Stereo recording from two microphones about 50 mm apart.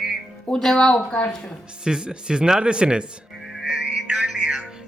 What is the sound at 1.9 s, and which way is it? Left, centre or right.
Speech, centre.